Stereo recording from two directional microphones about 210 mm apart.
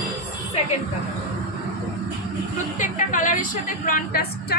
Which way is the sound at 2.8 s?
40° left (ahead or behind).